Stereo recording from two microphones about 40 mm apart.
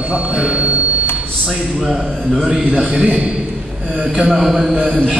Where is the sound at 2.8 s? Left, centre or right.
Right.